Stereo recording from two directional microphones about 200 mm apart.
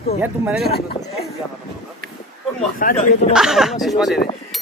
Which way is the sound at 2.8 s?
45° left (ahead or behind).